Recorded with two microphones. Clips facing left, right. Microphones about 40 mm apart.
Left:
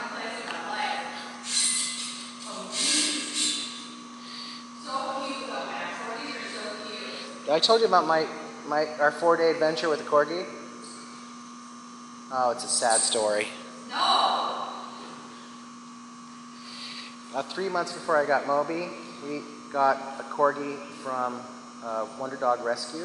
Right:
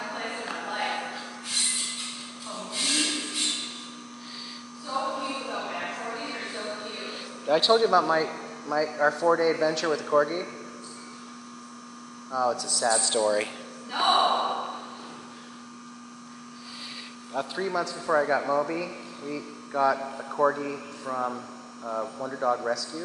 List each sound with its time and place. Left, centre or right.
0.0 s a sound: centre
2.7 s a sound: centre
4.8 s music: centre
5.1 s a sound: centre
8.6 s speech: centre
12.3 s speech: centre
13.9 s gasp: centre
17.3 s a man's voice: centre
21.0 s speech: centre
22.2 s a man's voice: centre
22.7 s a man's voice: centre